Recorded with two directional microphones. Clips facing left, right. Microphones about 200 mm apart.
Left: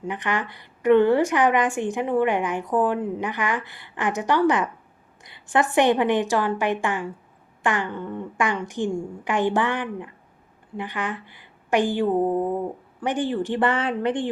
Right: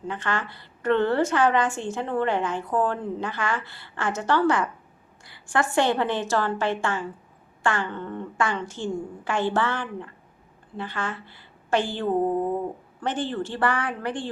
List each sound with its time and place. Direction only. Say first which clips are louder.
0.0 s a woman's voice: left 2 dB; 15° left (ahead or behind)